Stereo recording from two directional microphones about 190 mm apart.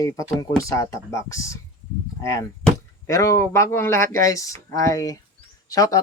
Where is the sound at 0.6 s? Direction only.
15° left (ahead or behind).